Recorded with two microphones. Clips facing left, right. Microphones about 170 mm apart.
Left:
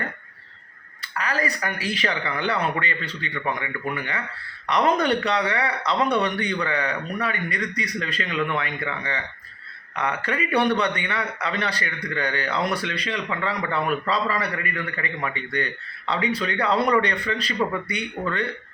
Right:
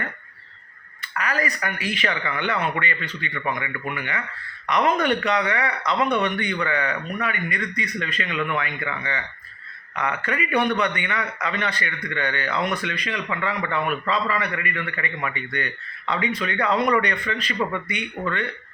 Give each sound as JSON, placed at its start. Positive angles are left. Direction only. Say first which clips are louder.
{"t": 1.2, "sound": "a man's voice", "louder": "even", "side_deg": 30}